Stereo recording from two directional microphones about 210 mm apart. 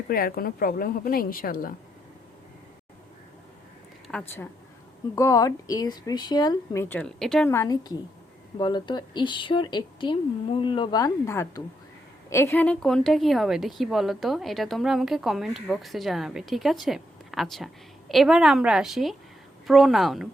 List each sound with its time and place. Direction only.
0.1 s a woman's voice: 45° left (ahead or behind)
4.1 s speech: centre (ahead or behind)
5.1 s a woman's voice: 15° left (ahead or behind)
6.8 s a woman's voice: 10° left (ahead or behind)
7.5 s a woman's voice: 15° left (ahead or behind); by 20.2 s centre (ahead or behind)